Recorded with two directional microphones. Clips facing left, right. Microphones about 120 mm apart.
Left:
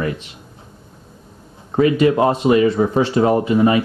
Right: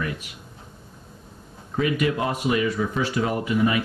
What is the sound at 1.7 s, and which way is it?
Speech, 35° left (ahead or behind).